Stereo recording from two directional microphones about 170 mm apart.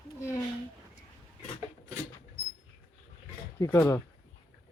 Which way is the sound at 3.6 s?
15° left (ahead or behind).